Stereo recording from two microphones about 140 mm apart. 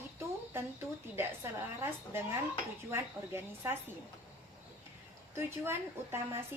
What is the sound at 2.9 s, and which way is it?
Speech, 15° right (ahead or behind).